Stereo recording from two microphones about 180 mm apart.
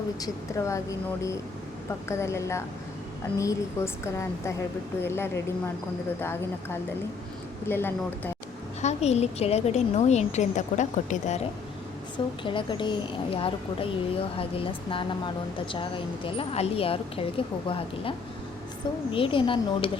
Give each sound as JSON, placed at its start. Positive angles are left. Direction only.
{"t": 0.2, "sound": "a woman's voice", "side_deg": 15}
{"t": 7.7, "sound": "a woman's voice", "side_deg": 10}
{"t": 8.8, "sound": "a woman's voice", "side_deg": 40}
{"t": 12.1, "sound": "a woman's voice", "side_deg": 30}
{"t": 19.1, "sound": "a woman's voice", "side_deg": 30}